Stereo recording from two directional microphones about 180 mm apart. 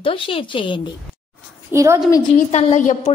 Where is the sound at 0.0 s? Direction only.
30° left (ahead or behind).